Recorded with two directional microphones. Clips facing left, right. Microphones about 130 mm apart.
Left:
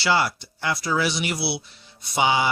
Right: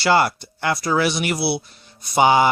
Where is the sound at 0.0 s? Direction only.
50° right (ahead or behind).